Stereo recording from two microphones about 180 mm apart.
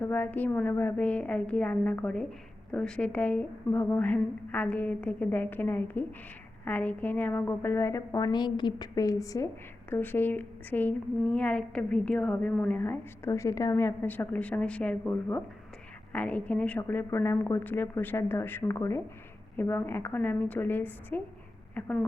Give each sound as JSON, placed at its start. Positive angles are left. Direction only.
{"t": 0.0, "sound": "a woman's voice", "side_deg": 10}